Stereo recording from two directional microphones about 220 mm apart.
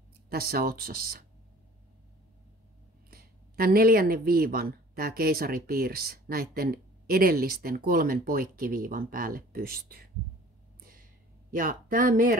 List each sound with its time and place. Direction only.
0.3 s speech: 45° right (ahead or behind)
3.1 s speech: 40° right (ahead or behind)
10.8 s a sound: 40° right (ahead or behind)
11.5 s speech: 40° right (ahead or behind)